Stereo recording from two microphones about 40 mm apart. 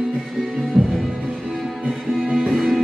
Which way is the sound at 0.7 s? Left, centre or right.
Centre.